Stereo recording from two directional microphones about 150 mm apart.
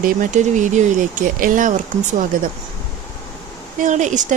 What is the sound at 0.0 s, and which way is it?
Speech, 65° right (ahead or behind).